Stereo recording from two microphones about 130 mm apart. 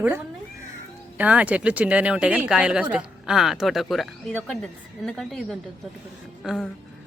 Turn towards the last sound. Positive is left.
turn(degrees=0)  # may be behind; listen again after turning